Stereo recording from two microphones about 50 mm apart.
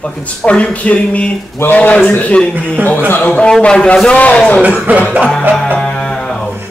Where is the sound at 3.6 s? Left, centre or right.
Centre.